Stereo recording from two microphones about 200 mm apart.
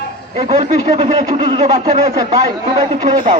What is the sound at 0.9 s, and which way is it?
Speech, 35° right (ahead or behind).